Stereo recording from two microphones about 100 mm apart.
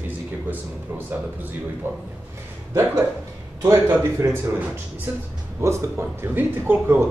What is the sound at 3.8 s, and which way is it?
Speech, 20° right (ahead or behind).